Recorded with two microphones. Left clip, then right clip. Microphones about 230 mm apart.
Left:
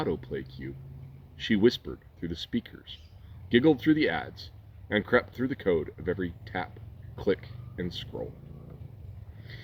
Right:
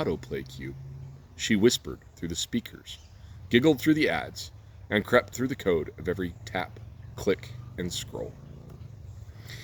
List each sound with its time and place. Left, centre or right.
0.0 s a man's voice: right